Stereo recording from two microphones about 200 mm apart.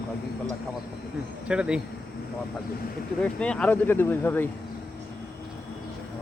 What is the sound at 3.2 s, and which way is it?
Speech, 5° left (ahead or behind).